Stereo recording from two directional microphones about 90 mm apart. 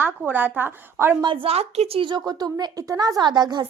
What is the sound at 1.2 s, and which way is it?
A woman's voice, 75° right (ahead or behind).